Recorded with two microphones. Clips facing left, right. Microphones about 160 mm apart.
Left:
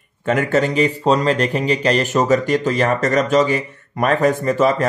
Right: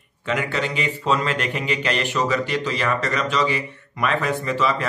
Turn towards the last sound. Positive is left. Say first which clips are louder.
# left 6 dB
turn(degrees=45)  # may be behind; listen again after turning